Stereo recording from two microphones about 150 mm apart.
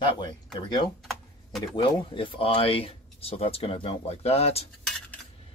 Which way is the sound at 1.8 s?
35° left (ahead or behind).